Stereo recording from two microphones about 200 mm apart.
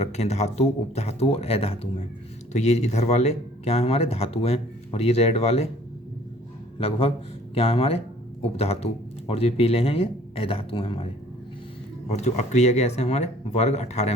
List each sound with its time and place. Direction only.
0.0 s speech: 35° left (ahead or behind)
6.7 s a man's voice: 30° left (ahead or behind)